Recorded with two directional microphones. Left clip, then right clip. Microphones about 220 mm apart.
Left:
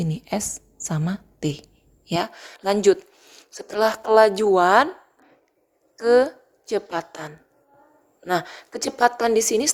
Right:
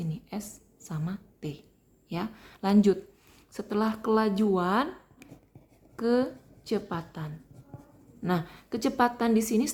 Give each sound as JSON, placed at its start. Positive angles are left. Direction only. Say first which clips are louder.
{"t": 0.0, "sound": "a woman's voice", "louder": "left 12 dB", "side_deg": 30}
{"t": 6.0, "sound": "a woman's voice", "louder": "left 10 dB", "side_deg": 25}